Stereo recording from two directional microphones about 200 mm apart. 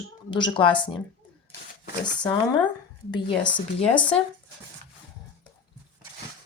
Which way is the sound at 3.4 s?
5° left (ahead or behind).